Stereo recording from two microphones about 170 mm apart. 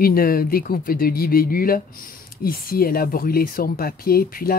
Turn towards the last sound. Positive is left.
turn(degrees=60)  # may be behind; listen again after turning